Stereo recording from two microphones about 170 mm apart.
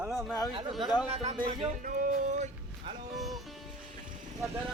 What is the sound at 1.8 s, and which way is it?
Music, 50° right (ahead or behind).